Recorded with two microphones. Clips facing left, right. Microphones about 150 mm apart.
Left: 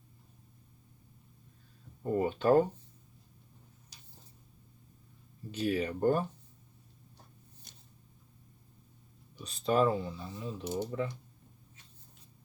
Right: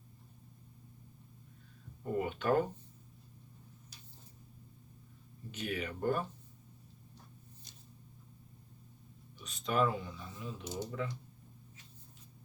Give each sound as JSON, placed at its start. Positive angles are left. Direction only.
{"t": 2.1, "sound": "speech", "side_deg": 35}
{"t": 5.5, "sound": "speech", "side_deg": 35}
{"t": 9.4, "sound": "speech", "side_deg": 35}